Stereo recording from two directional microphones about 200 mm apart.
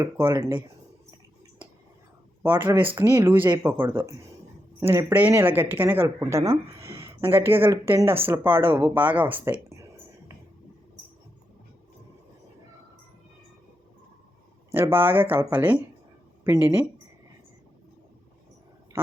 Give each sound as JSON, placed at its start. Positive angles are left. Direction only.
{"t": 0.0, "sound": "speech", "side_deg": -15}
{"t": 2.4, "sound": "speech", "side_deg": -10}
{"t": 14.7, "sound": "speech", "side_deg": -10}